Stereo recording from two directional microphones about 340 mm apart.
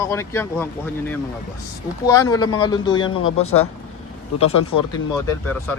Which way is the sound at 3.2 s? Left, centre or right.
Left.